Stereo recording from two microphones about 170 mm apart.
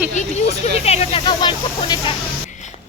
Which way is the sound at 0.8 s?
40° left (ahead or behind).